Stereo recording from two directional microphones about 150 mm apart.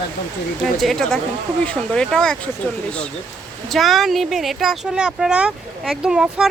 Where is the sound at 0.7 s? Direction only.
Centre (ahead or behind).